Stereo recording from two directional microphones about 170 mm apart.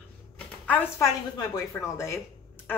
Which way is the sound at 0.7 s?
10° left (ahead or behind).